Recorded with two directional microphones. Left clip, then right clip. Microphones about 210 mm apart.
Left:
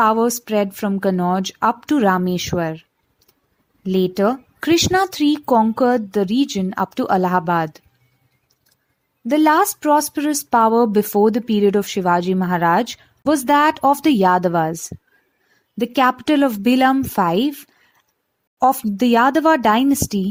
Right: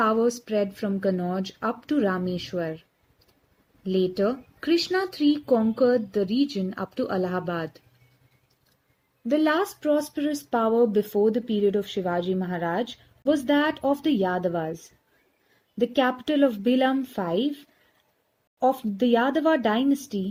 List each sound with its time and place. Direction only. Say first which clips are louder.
0.0 s speech: left 7 dB; 40° left (ahead or behind)
3.8 s speech: left 6 dB; 45° left (ahead or behind)
9.3 s speech: left 8 dB; 45° left (ahead or behind)
15.8 s speech: left 7 dB; 45° left (ahead or behind)
18.6 s speech: left 7 dB; 50° left (ahead or behind)